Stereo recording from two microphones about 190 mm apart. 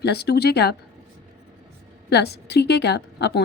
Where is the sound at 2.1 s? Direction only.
60° left (ahead or behind).